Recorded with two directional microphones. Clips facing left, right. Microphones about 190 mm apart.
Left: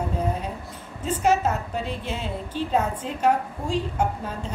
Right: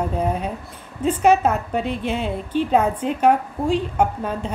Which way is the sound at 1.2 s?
60° right (ahead or behind).